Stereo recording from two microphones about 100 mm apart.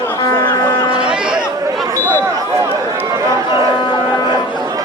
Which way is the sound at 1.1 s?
10° right (ahead or behind).